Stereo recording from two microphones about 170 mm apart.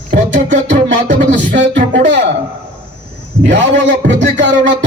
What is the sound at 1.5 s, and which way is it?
Music, 90° right.